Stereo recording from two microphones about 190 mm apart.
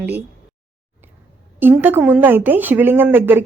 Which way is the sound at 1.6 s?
10° right (ahead or behind).